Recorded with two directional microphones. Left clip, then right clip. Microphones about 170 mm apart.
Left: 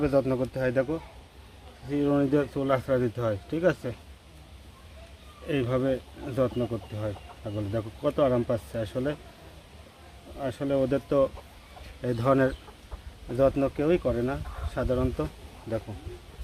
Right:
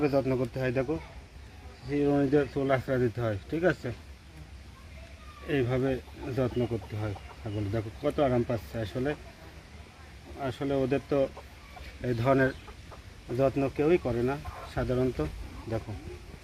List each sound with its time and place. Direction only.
0.0 s speech: 35° left (ahead or behind)
1.9 s speech: 30° left (ahead or behind)
5.5 s speech: 25° left (ahead or behind)
7.7 s speech: 30° left (ahead or behind)
10.4 s speech: 30° left (ahead or behind)